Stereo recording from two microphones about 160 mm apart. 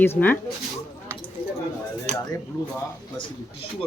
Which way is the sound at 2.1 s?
45° right (ahead or behind).